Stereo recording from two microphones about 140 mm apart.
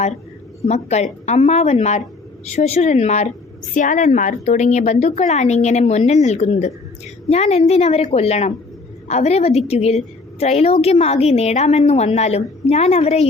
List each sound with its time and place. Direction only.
0.7 s a woman's voice: 50° left (ahead or behind)
3.8 s a woman's voice: 65° left (ahead or behind); by 13.2 s 50° left (ahead or behind)